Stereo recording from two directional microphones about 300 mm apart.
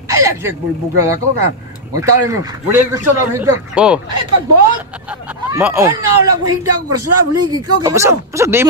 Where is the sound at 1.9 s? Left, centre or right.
Centre.